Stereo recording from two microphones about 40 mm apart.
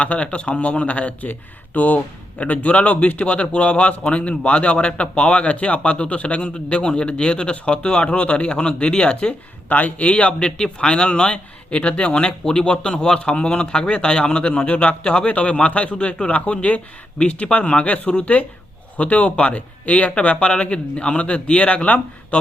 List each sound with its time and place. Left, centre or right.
0.0 s speech: left
9.6 s a man's voice: left
17.8 s speech: left